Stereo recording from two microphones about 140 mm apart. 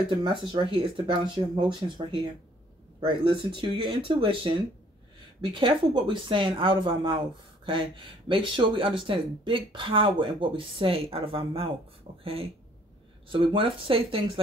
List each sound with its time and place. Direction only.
0.2 s speech: 35° right (ahead or behind)